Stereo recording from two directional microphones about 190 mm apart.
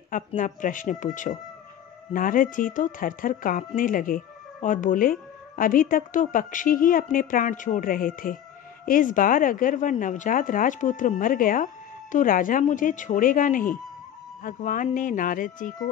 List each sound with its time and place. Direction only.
0.4 s speech: 45° left (ahead or behind)